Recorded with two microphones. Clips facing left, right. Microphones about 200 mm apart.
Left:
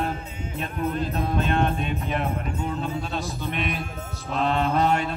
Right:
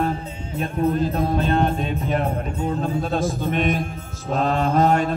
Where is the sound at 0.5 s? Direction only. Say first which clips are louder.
Right 6 dB; 35° right (ahead or behind).